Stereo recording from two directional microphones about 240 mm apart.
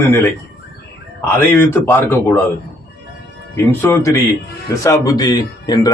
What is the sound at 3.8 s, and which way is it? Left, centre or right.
Speech, centre.